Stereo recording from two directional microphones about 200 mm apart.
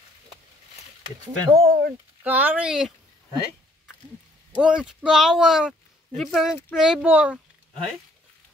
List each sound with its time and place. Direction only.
1.2 s speech: 50° right (ahead or behind)
2.2 s speech: 10° right (ahead or behind)
4.6 s speech: 5° right (ahead or behind)